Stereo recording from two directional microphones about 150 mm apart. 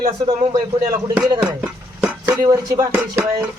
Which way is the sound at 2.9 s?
15° right (ahead or behind).